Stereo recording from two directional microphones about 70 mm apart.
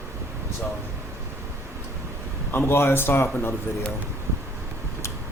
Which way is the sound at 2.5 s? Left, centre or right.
Left.